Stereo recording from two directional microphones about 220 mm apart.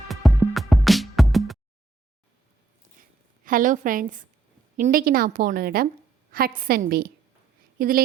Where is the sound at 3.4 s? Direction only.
35° right (ahead or behind).